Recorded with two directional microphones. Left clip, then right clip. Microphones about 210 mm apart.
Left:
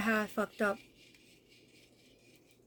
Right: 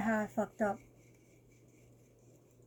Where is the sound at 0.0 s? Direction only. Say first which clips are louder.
Left 2 dB; 20° left (ahead or behind).